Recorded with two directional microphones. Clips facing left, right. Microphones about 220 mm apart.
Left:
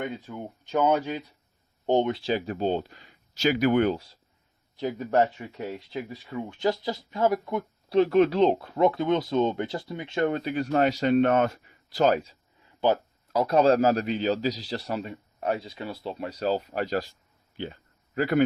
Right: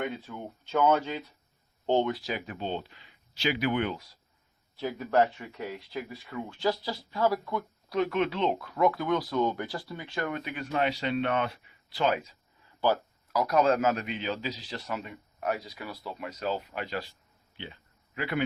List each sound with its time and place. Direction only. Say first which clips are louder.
0.3 s a man's voice: left 3 dB; 15° left (ahead or behind)
4.8 s a man's voice: left 2 dB; 20° left (ahead or behind); by 17.1 s 40° left (ahead or behind)
17.6 s a sound: left 8 dB; 45° left (ahead or behind)